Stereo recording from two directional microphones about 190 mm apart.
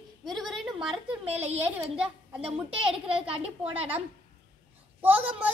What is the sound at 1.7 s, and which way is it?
Speech, 5° right (ahead or behind).